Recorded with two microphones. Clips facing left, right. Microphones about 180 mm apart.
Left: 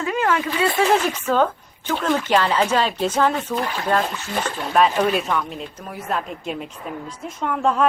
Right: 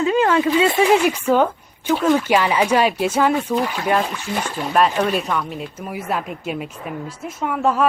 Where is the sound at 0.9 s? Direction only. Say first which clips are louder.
Right 3 dB; 10° right (ahead or behind).